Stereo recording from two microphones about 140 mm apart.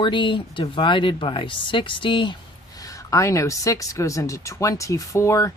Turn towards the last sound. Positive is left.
turn(degrees=20)  # may be behind; listen again after turning